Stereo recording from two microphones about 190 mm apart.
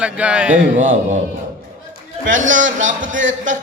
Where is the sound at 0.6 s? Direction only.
40° right (ahead or behind).